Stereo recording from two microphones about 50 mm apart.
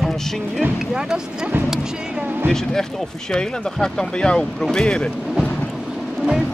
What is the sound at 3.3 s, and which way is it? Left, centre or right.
Speech, centre.